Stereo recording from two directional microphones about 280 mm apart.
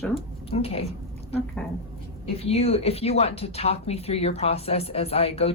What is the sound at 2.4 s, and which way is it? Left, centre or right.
Speech, left.